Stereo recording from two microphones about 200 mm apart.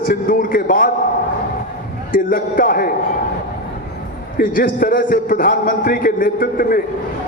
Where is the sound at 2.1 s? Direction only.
45° left (ahead or behind).